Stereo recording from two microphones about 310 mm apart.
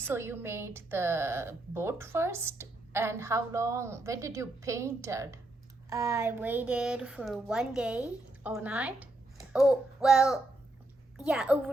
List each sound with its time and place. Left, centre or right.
0.0 s a woman's voice: centre
9.5 s child singing: centre
11.2 s speech: centre